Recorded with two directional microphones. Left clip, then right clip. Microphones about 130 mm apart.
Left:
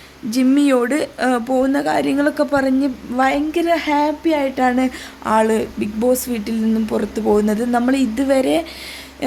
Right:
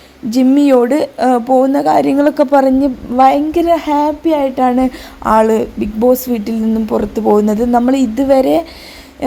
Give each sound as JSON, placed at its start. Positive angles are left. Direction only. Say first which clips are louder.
{"t": 0.3, "sound": "a woman's voice", "louder": "right 5 dB", "side_deg": -35}